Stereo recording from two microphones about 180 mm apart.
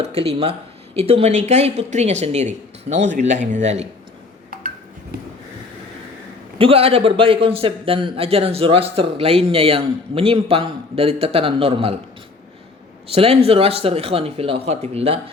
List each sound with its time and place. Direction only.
0.0 s a man's voice: 35° right (ahead or behind)
6.6 s a man's voice: 30° right (ahead or behind)
13.1 s a man's voice: 35° right (ahead or behind)